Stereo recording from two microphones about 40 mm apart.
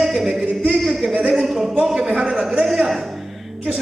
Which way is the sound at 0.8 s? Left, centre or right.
Centre.